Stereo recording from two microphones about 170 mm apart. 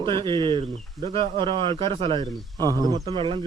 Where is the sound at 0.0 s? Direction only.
30° right (ahead or behind).